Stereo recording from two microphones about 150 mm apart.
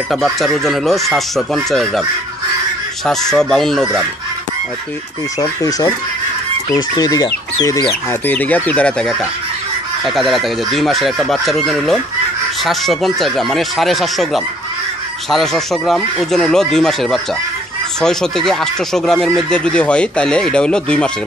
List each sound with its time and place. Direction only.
0.1 s speech: centre (ahead or behind)
3.1 s speech: 5° left (ahead or behind)
5.4 s speech: 25° left (ahead or behind)
8.1 s speech: 10° left (ahead or behind)